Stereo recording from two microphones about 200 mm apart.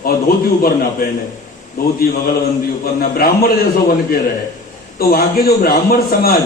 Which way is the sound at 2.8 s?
45° left (ahead or behind).